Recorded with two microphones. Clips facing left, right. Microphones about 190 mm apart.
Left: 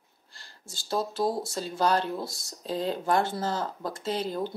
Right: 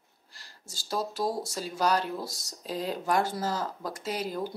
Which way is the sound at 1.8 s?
30° left (ahead or behind).